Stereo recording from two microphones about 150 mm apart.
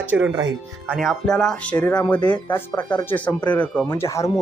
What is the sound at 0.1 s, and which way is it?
Speech, 10° right (ahead or behind).